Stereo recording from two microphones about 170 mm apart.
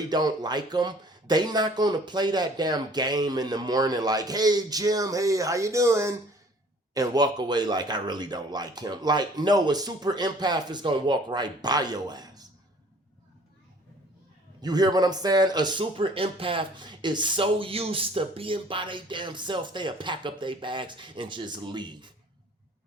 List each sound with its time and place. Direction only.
0.1 s speech: 25° right (ahead or behind)
14.6 s speech: 25° right (ahead or behind)